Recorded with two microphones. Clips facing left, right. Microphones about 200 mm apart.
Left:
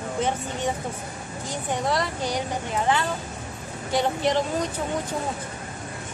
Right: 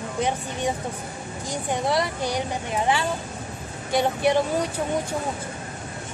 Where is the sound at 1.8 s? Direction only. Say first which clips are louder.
Right 2 dB; 10° right (ahead or behind).